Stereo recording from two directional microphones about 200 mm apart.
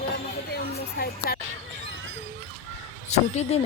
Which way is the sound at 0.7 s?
50° left (ahead or behind).